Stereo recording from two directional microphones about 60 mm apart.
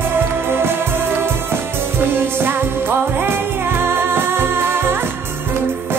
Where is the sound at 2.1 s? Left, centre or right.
Right.